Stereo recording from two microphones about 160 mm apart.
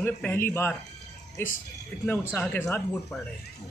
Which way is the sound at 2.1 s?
10° left (ahead or behind).